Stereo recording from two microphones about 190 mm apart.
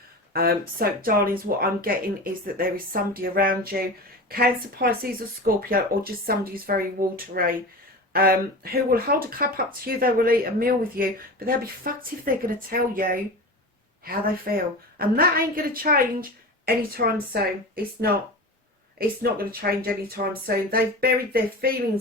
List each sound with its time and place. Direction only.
0.3 s speech: 50° right (ahead or behind)